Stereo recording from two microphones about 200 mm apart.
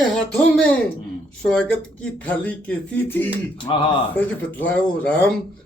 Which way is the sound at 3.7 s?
25° left (ahead or behind).